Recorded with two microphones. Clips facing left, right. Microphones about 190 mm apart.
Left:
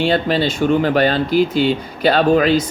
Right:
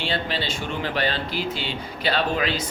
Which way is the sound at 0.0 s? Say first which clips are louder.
Left 11 dB; 45° left (ahead or behind).